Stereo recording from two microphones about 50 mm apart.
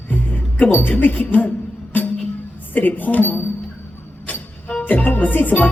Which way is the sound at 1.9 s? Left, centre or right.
Left.